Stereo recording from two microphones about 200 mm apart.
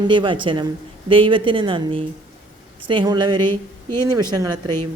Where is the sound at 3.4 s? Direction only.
10° left (ahead or behind).